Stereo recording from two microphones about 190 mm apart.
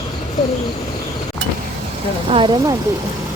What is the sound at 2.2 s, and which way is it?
Speech, 25° right (ahead or behind).